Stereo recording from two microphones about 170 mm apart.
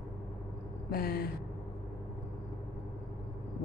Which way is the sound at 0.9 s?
60° left (ahead or behind).